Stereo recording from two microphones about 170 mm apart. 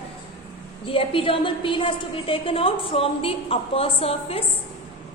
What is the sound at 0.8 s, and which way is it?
A woman's voice, 30° left (ahead or behind).